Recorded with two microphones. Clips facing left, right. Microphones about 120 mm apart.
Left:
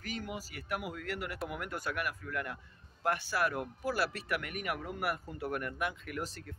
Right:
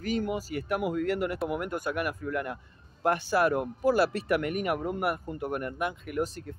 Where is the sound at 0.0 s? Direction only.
25° right (ahead or behind).